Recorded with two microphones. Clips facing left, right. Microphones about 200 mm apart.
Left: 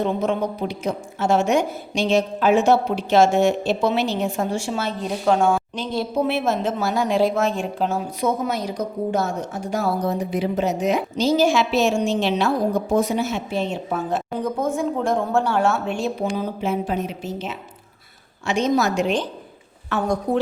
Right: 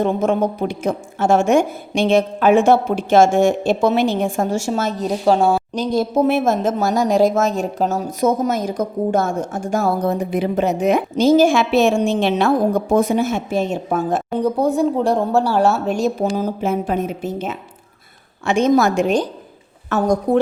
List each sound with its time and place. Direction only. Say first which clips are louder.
0.0 s speech: right 4 dB; 50° right (ahead or behind)
14.3 s speech: right 7 dB; 35° right (ahead or behind)